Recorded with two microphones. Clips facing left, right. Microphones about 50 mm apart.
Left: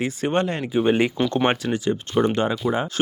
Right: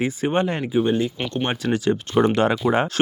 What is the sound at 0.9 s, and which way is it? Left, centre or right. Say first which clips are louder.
Speech: left 3 dB; left.